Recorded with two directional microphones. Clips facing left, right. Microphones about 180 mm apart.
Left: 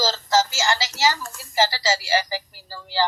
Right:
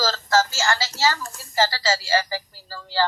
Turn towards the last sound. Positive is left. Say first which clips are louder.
# even
turn(degrees=15)  # may be behind; listen again after turning